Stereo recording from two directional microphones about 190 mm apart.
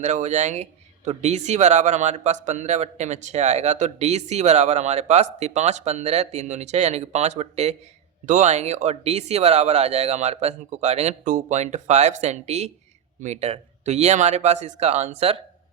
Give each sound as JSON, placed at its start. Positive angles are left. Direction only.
{"t": 0.0, "sound": "speech", "side_deg": -40}